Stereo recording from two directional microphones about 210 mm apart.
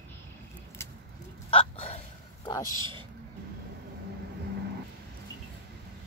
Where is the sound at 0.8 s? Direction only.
10° left (ahead or behind).